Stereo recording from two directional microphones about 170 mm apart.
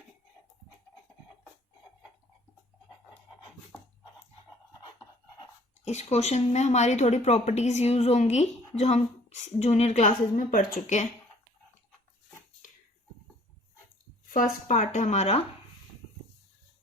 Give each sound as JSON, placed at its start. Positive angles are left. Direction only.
{"t": 5.4, "sound": "speech", "side_deg": 40}
{"t": 14.3, "sound": "speech", "side_deg": 50}